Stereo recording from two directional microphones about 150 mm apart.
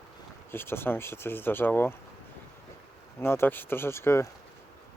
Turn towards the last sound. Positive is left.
turn(degrees=20)  # may be behind; listen again after turning